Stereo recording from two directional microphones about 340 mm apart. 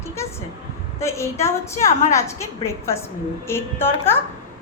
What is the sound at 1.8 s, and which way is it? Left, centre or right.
Speech, left.